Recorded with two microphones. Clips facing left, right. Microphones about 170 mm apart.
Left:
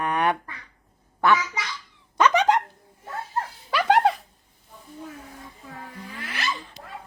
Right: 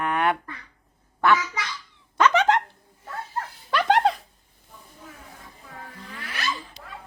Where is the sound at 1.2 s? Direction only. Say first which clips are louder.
Even; 15° left (ahead or behind).